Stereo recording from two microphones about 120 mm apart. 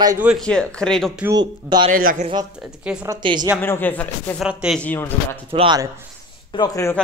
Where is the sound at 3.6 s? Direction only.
15° left (ahead or behind).